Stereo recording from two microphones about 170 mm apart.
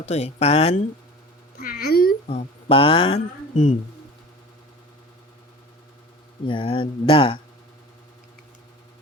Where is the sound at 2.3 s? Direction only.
35° left (ahead or behind).